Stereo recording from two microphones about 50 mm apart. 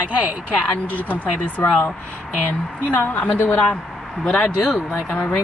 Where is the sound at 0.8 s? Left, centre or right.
Left.